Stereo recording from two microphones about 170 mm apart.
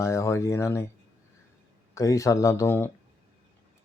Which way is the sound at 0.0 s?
15° left (ahead or behind).